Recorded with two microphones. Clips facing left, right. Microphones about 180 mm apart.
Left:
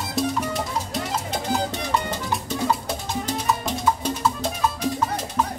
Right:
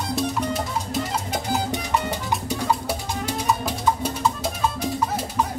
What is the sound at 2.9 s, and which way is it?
Music, 10° right (ahead or behind).